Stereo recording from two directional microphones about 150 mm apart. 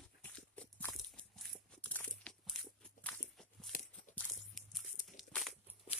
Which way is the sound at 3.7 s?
70° left (ahead or behind).